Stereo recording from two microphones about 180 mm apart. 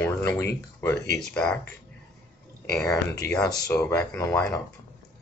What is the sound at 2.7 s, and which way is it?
Speech, 10° left (ahead or behind).